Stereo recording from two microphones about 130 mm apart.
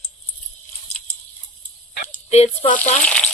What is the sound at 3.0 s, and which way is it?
Frying, 10° left (ahead or behind).